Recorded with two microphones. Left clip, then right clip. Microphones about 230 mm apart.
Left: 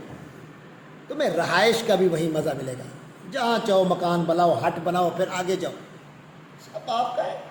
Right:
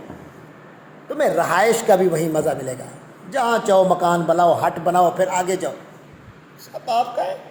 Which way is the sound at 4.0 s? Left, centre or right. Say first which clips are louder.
Right 5 dB; centre.